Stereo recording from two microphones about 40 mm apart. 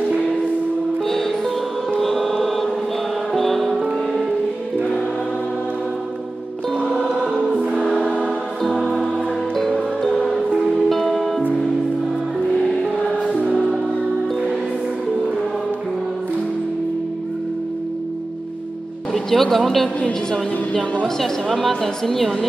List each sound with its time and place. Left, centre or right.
2.0 s music: centre
10.9 s music: centre
13.4 s music: right
19.1 s music: centre
21.2 s a woman's voice: centre